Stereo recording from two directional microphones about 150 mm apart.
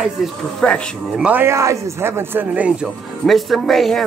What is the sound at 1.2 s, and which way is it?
A man's voice, 15° right (ahead or behind).